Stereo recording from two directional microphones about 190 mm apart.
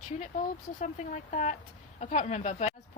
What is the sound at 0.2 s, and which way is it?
A woman's voice, 40° left (ahead or behind).